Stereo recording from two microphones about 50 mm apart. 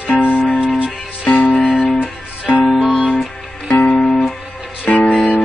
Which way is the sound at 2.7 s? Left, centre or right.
Centre.